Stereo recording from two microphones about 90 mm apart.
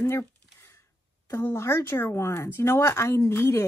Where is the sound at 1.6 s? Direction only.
35° left (ahead or behind).